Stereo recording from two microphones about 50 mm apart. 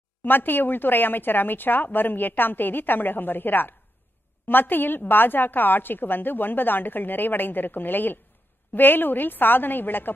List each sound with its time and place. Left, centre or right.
0.2 s a woman's voice: left